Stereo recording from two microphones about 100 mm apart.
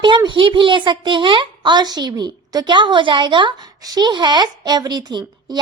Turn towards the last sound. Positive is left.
turn(degrees=-45)  # may be behind; listen again after turning